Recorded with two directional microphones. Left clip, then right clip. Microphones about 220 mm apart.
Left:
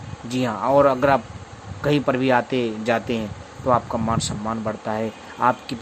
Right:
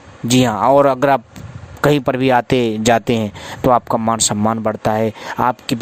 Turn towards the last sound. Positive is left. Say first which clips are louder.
# right 3 dB
turn(degrees=-45)  # may be behind; listen again after turning